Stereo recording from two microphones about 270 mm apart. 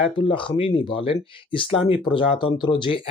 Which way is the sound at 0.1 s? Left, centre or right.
Centre.